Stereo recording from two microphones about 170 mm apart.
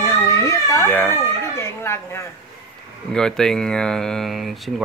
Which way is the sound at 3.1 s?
5° left (ahead or behind).